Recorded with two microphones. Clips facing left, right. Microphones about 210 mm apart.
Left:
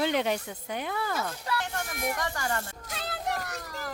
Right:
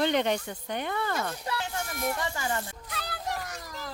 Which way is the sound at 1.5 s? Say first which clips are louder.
Left 1 dB; 15° right (ahead or behind).